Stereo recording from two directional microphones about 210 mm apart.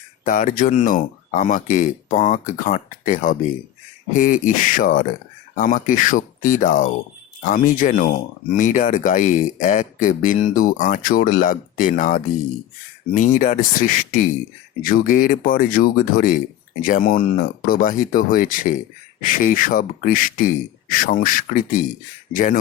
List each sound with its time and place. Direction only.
0.3 s speech: 35° left (ahead or behind)